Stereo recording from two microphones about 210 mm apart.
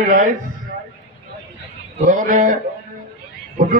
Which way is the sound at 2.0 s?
40° right (ahead or behind).